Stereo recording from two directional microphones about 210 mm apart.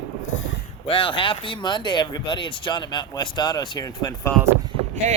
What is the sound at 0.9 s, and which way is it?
Speech, 25° left (ahead or behind).